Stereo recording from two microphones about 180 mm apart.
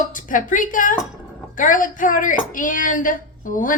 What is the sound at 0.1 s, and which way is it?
A woman's voice, 45° left (ahead or behind).